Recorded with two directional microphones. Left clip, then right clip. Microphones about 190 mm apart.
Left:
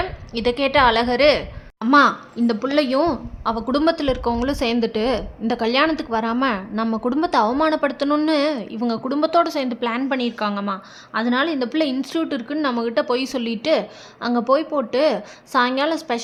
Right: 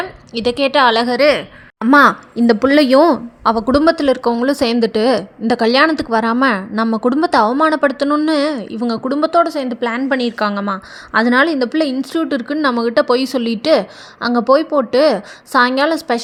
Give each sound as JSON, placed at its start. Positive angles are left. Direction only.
{"t": 0.3, "sound": "speech", "side_deg": -20}
{"t": 1.8, "sound": "speech", "side_deg": -35}